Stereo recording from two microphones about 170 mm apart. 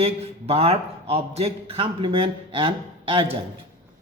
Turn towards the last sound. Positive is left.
turn(degrees=-30)  # may be behind; listen again after turning